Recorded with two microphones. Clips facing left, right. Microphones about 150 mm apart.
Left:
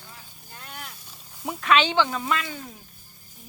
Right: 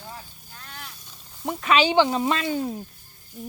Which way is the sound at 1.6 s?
5° right (ahead or behind).